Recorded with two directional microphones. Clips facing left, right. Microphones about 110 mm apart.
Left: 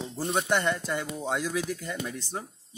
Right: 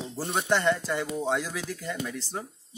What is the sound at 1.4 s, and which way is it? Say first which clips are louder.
Speech: left 4 dB; 20° left (ahead or behind).